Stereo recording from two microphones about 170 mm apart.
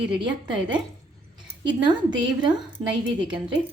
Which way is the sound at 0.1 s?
30° right (ahead or behind).